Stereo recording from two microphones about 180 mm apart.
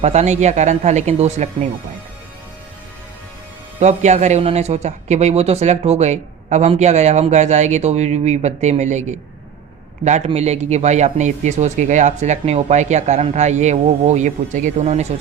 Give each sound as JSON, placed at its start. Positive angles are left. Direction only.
{"t": 0.0, "sound": "speech", "side_deg": -40}
{"t": 3.8, "sound": "speech", "side_deg": -40}